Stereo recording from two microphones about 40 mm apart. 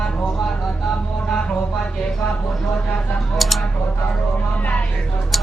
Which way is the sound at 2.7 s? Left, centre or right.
Left.